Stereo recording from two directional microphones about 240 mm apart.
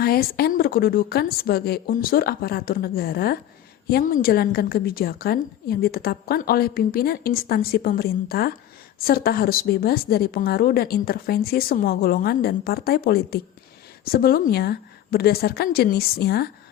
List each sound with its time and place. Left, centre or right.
0.0 s a woman's voice: left